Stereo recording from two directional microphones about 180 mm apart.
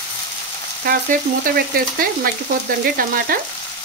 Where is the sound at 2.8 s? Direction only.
55° right (ahead or behind).